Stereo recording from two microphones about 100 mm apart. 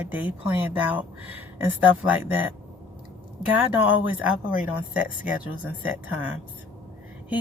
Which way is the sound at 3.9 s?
15° right (ahead or behind).